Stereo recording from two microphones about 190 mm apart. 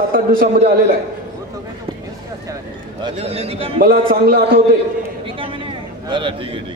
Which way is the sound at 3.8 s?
50° right (ahead or behind).